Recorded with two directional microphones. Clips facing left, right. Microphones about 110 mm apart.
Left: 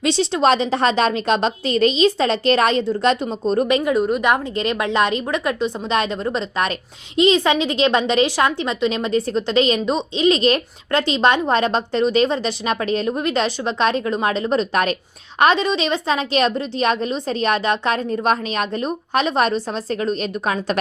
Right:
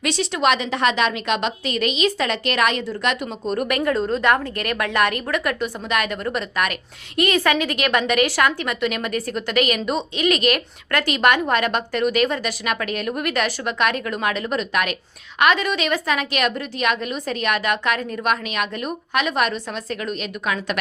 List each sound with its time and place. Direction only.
0.0 s a woman's voice: 30° left (ahead or behind)